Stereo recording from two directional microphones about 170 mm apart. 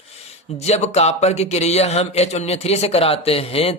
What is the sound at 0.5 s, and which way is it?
A man's voice, 40° left (ahead or behind).